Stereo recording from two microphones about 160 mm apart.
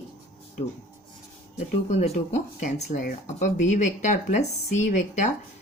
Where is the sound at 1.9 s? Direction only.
45° left (ahead or behind).